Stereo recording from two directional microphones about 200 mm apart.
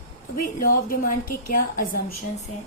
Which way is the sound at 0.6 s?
45° left (ahead or behind).